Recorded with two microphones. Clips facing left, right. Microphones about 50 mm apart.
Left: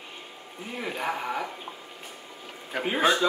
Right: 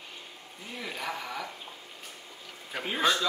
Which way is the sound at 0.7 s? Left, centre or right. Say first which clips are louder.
Left 5 dB; left.